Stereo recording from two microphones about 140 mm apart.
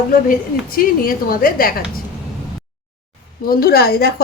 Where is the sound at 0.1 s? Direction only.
90° left.